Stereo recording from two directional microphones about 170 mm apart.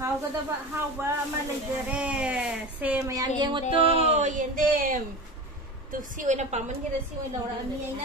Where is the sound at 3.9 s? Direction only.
45° right (ahead or behind).